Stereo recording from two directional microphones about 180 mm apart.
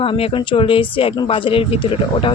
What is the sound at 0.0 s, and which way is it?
Speech, 30° left (ahead or behind).